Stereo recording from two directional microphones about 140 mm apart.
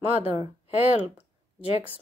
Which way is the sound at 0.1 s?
45° left (ahead or behind).